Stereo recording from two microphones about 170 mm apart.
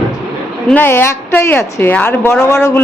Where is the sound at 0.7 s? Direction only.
10° left (ahead or behind).